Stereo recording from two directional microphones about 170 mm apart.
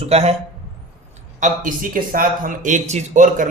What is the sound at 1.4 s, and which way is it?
A man's voice, 50° right (ahead or behind).